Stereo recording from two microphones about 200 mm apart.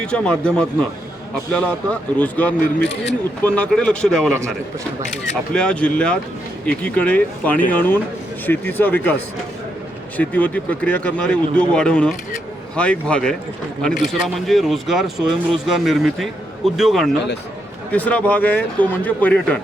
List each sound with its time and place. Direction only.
0.0 s a man's voice: 5° left (ahead or behind)
2.8 s speech: 60° left (ahead or behind)
3.4 s a man's voice: 5° left (ahead or behind)
5.5 s a man's voice: 5° left (ahead or behind)
10.2 s a man's voice: 5° left (ahead or behind)